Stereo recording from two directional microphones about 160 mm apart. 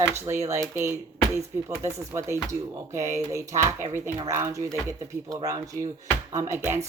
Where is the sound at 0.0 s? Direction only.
15° right (ahead or behind).